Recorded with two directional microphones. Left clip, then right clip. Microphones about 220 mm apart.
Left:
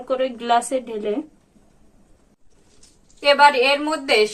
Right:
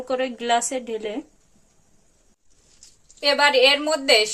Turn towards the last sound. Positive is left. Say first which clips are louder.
# right 1 dB
turn(degrees=-35)  # may be behind; listen again after turning